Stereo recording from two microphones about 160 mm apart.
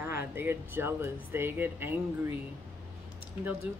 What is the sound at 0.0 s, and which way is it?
Speech, 15° right (ahead or behind).